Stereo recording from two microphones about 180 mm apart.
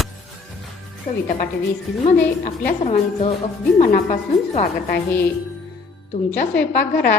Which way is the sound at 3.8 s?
40° left (ahead or behind).